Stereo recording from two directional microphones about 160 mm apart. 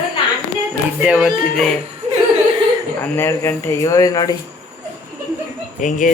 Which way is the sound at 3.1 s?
15° left (ahead or behind).